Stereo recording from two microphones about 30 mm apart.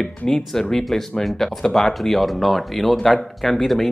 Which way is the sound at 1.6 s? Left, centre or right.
Centre.